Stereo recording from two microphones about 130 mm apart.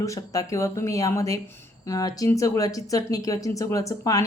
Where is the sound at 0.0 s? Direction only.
25° left (ahead or behind).